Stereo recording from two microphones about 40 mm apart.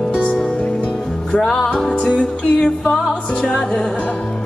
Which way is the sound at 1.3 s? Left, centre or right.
Left.